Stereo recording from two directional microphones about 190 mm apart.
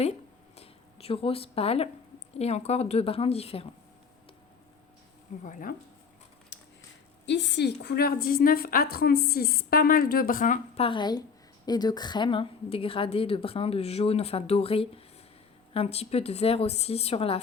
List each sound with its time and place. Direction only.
0.0 s a sound: 35° left (ahead or behind)
2.4 s speech: 35° left (ahead or behind)
5.4 s a woman's voice: 40° left (ahead or behind)
6.5 s a sound: 70° left (ahead or behind)
7.3 s a woman's voice: 70° left (ahead or behind); by 10.8 s 45° left (ahead or behind)
10.8 s a woman's voice: 25° left (ahead or behind)